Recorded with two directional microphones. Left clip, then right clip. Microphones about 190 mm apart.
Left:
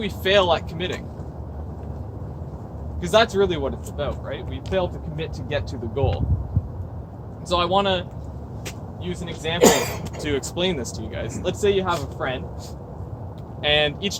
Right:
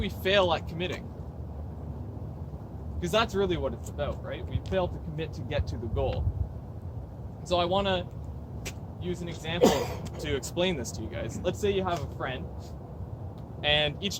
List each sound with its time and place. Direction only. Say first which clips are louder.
0.0 s speech: left 6 dB; 20° right (ahead or behind)
3.0 s speech: left 9 dB; 20° right (ahead or behind)
7.4 s speech: left 6 dB; 20° right (ahead or behind)
9.0 s speech: left 7 dB; 15° right (ahead or behind)
9.6 s speech: left 7 dB; 50° left (ahead or behind)
10.2 s speech: left 5 dB; 20° right (ahead or behind)
13.6 s speech: left 6 dB; 20° right (ahead or behind)